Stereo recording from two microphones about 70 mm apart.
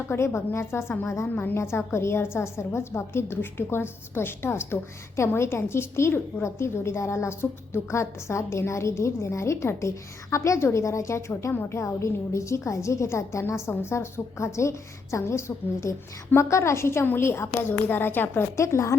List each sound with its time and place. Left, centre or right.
0.1 s a woman's voice: left
18.5 s speech: left